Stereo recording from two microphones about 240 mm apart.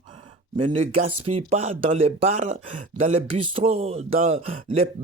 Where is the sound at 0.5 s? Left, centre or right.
Right.